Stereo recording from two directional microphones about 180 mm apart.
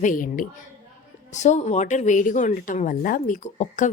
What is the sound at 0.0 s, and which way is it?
A woman's voice, 50° left (ahead or behind).